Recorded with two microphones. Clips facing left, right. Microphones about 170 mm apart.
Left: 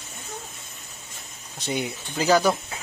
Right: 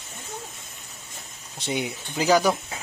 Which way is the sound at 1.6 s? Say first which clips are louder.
Even; 15° right (ahead or behind).